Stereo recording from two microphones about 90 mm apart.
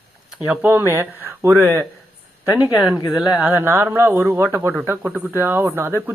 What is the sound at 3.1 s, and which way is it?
Speech, 10° right (ahead or behind).